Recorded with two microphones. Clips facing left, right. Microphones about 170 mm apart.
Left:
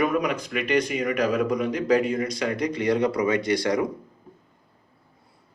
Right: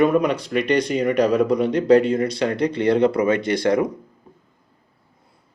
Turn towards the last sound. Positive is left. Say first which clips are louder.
# right 4 dB
turn(degrees=-25)  # may be behind; listen again after turning